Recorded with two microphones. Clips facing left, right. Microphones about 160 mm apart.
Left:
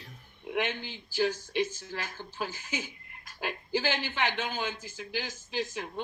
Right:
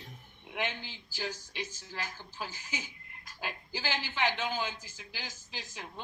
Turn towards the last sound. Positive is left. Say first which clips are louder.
# left 11 dB
turn(degrees=60)  # may be behind; listen again after turning